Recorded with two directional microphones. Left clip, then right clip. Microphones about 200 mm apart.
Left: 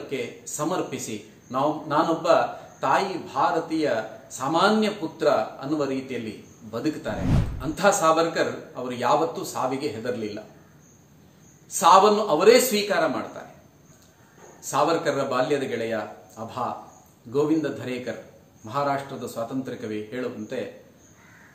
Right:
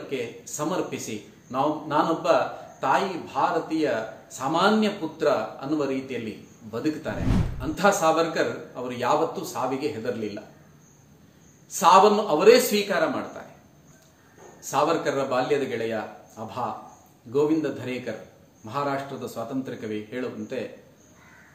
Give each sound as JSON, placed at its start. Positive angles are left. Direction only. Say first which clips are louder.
{"t": 0.1, "sound": "a man's voice", "louder": "even", "side_deg": 15}
{"t": 11.7, "sound": "a man's voice", "louder": "even", "side_deg": 15}
{"t": 14.6, "sound": "a man's voice", "louder": "left 1 dB", "side_deg": 15}